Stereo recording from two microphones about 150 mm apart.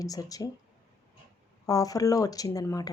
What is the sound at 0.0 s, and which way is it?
Speech, 25° left (ahead or behind).